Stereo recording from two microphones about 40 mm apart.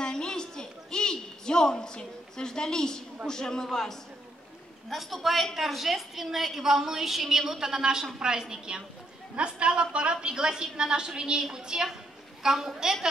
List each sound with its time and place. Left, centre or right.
0.0 s a sound: centre
3.3 s a man's voice: centre
4.8 s a man's voice: centre